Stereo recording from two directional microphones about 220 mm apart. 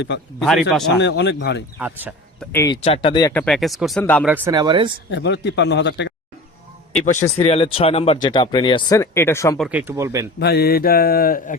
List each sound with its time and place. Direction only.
0.3 s speech: centre (ahead or behind)
0.9 s mantra: 50° left (ahead or behind)
1.8 s speech: 10° right (ahead or behind)
2.4 s speech: 10° left (ahead or behind)
2.8 s speech: 25° left (ahead or behind)
3.3 s speech: 5° left (ahead or behind)
4.3 s speech: 10° right (ahead or behind)
5.1 s mantra: 50° left (ahead or behind)
7.0 s speech: 35° left (ahead or behind); by 9.6 s 10° left (ahead or behind)
9.6 s speech: 5° right (ahead or behind)
10.4 s mantra: 45° left (ahead or behind)